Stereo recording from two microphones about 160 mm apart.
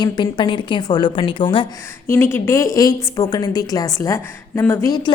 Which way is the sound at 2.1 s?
15° left (ahead or behind).